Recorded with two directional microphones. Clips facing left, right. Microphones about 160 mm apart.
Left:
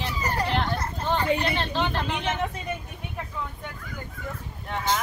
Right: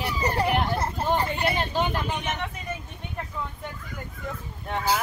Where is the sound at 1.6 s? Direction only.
10° right (ahead or behind).